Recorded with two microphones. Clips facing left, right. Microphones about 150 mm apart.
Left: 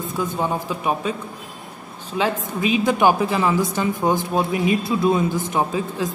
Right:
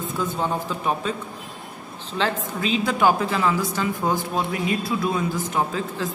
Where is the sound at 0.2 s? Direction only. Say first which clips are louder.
Left 2 dB; 10° left (ahead or behind).